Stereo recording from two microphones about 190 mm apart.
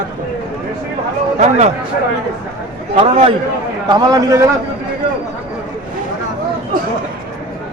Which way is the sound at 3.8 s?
20° right (ahead or behind).